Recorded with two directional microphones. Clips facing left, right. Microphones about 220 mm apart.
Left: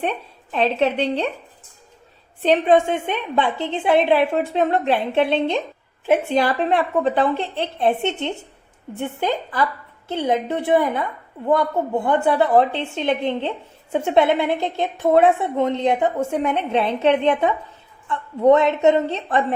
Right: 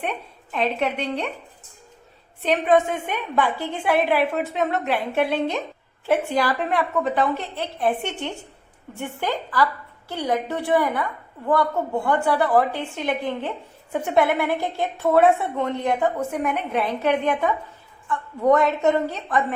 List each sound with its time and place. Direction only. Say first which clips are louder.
0.0 s a woman's voice: left 4 dB; 30° left (ahead or behind)
2.4 s a woman's voice: left 3 dB; 30° left (ahead or behind)